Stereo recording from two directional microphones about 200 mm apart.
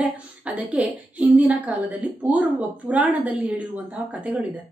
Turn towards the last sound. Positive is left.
turn(degrees=-5)  # may be behind; listen again after turning